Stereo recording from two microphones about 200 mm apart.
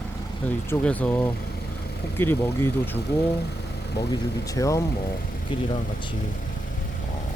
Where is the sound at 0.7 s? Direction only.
5° left (ahead or behind).